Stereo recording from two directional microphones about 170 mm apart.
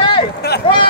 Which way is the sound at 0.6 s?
30° left (ahead or behind).